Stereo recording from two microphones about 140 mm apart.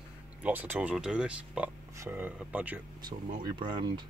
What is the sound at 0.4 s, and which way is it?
Speech, 15° right (ahead or behind).